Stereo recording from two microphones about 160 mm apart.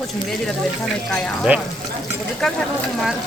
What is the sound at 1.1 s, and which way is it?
Speech, 5° left (ahead or behind).